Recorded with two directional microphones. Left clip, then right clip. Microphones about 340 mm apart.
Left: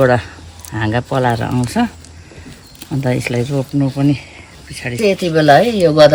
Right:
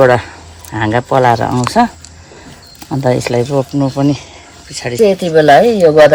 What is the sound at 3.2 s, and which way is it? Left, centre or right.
Speech, centre.